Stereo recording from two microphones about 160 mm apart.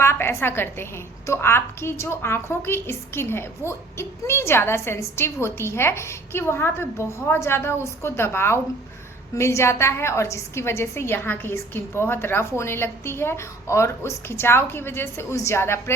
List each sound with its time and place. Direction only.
0.0 s a woman's voice: 15° left (ahead or behind)